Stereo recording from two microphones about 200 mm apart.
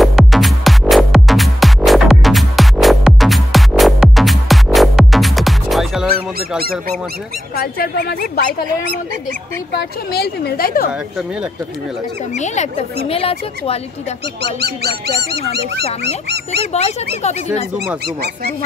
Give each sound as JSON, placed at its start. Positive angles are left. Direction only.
{"t": 0.0, "sound": "music", "side_deg": 0}
{"t": 7.5, "sound": "a woman's voice", "side_deg": 50}
{"t": 9.8, "sound": "a woman's voice", "side_deg": 50}
{"t": 12.4, "sound": "speech", "side_deg": 35}
{"t": 14.4, "sound": "speech", "side_deg": -55}
{"t": 16.7, "sound": "speech", "side_deg": 35}